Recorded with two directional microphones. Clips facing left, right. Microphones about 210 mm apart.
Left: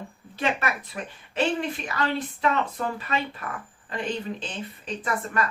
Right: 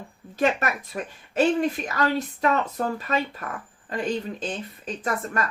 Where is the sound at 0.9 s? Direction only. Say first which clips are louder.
Right 7 dB; 40° right (ahead or behind).